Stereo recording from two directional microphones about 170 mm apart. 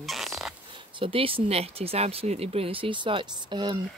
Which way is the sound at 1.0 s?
30° right (ahead or behind).